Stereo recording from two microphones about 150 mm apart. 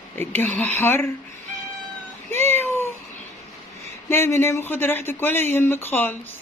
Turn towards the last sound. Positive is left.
turn(degrees=15)  # may be behind; listen again after turning